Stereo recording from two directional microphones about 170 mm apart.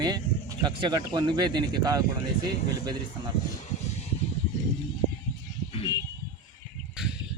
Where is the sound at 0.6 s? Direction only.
25° right (ahead or behind).